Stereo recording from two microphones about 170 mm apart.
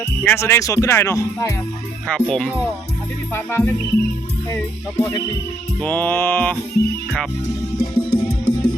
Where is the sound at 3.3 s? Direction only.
15° left (ahead or behind).